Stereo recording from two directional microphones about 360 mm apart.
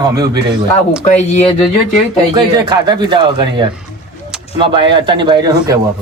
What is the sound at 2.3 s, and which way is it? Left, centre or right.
Speech, centre.